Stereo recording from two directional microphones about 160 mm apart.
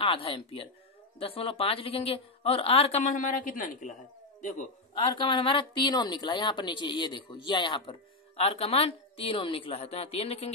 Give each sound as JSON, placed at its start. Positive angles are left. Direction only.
{"t": 0.0, "sound": "a man's voice", "side_deg": 35}
{"t": 4.9, "sound": "speech", "side_deg": 30}